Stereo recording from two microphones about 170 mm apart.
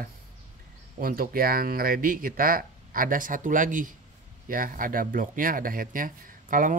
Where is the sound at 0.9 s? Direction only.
60° right (ahead or behind).